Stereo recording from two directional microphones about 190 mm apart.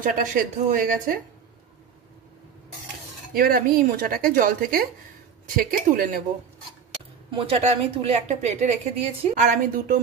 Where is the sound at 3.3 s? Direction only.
50° right (ahead or behind).